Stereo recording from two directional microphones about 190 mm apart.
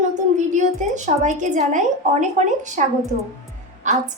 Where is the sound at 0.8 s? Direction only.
40° right (ahead or behind).